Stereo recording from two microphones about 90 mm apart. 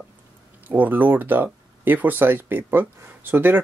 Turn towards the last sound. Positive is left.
turn(degrees=-20)  # may be behind; listen again after turning